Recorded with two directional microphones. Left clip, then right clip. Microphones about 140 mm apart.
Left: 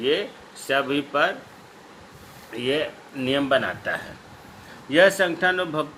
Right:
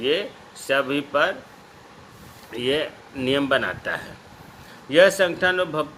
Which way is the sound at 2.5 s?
50° right (ahead or behind).